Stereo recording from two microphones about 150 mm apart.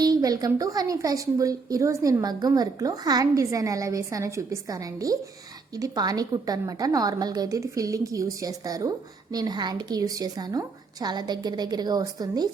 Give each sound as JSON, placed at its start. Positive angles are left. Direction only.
{"t": 0.0, "sound": "a woman's voice", "side_deg": -25}